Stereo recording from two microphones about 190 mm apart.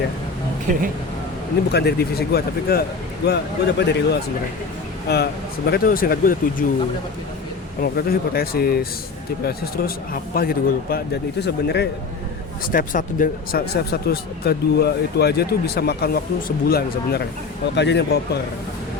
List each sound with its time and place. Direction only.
1.7 s speech: 60° left (ahead or behind)
7.8 s speech: 50° left (ahead or behind)
12.7 s speech: 45° left (ahead or behind)
17.7 s speech: 65° left (ahead or behind)